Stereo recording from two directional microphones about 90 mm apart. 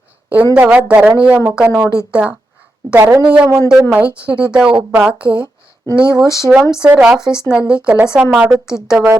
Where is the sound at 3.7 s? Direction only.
15° right (ahead or behind).